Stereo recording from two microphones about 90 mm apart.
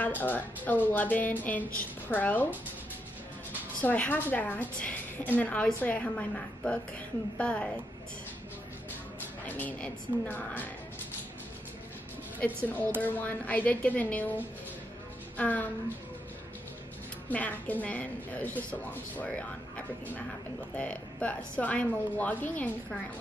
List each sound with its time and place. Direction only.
0.0 s a woman's voice: 20° left (ahead or behind)
3.8 s a woman's voice: 20° left (ahead or behind)
9.5 s a woman's voice: 20° left (ahead or behind)
12.4 s a woman's voice: 15° left (ahead or behind)
17.3 s a woman's voice: 15° left (ahead or behind)
20.7 s a woman's voice: 15° left (ahead or behind)